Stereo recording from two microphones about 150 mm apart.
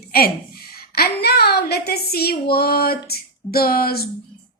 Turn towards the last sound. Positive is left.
turn(degrees=85)